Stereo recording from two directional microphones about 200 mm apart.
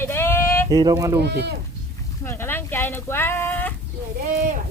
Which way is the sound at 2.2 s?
10° left (ahead or behind).